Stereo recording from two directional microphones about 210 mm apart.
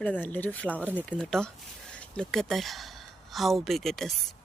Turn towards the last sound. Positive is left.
turn(degrees=0)  # may be behind; listen again after turning